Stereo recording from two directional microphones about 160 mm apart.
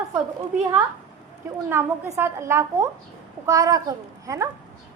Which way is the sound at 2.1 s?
15° right (ahead or behind).